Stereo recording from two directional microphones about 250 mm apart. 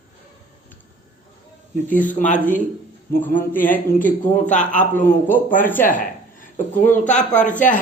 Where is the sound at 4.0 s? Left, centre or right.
Centre.